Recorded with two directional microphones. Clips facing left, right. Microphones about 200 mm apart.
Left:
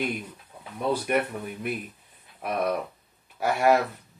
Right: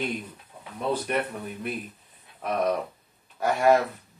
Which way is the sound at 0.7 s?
10° left (ahead or behind).